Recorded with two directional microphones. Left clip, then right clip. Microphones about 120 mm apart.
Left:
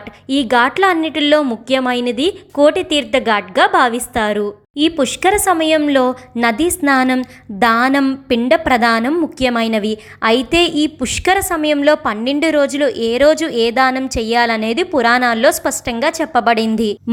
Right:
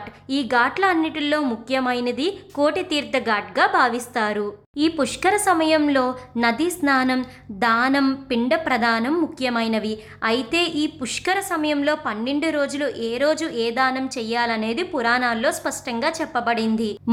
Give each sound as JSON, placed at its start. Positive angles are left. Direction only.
{"t": 0.3, "sound": "a woman's voice", "side_deg": 35}